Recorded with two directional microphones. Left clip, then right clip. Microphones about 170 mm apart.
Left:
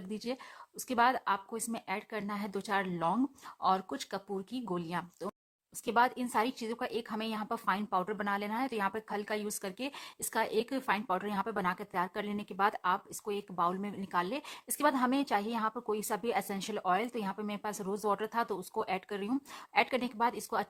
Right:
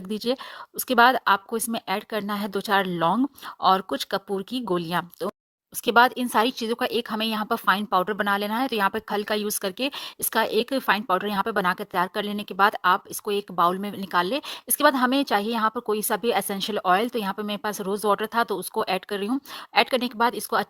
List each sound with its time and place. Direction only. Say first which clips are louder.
0.9 s speech: right 11 dB; 40° right (ahead or behind)